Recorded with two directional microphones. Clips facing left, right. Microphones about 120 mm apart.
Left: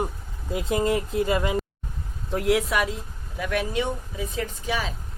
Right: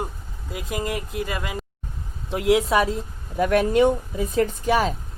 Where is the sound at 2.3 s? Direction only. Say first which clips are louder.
Right 3 dB; 20° right (ahead or behind).